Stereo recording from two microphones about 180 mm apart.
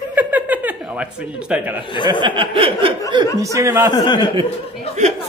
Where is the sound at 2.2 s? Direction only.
30° right (ahead or behind).